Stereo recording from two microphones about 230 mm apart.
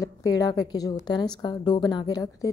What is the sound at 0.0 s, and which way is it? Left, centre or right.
A woman's voice, centre.